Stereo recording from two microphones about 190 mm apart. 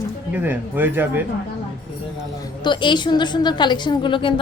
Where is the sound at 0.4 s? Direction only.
10° right (ahead or behind).